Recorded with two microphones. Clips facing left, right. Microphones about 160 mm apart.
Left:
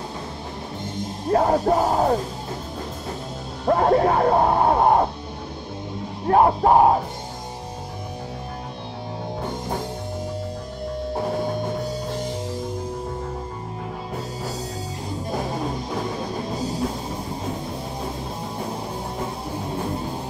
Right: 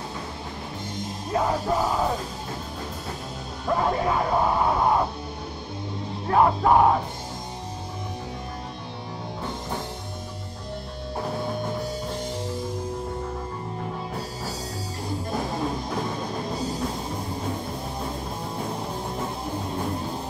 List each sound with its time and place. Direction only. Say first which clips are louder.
1.3 s music: left 6 dB; 50° left (ahead or behind)
3.7 s music: left 6 dB; 50° left (ahead or behind)
6.2 s music: left 3 dB; 40° left (ahead or behind)